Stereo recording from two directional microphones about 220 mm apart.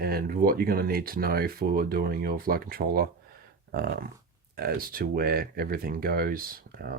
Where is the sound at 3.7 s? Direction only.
45° right (ahead or behind).